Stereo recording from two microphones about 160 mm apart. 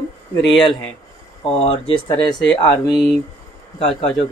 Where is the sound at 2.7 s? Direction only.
20° left (ahead or behind).